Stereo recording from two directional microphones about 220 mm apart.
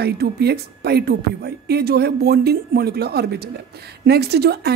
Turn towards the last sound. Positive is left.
turn(degrees=-45)  # may be behind; listen again after turning